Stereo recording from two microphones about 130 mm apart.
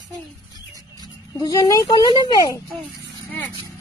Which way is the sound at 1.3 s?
30° left (ahead or behind).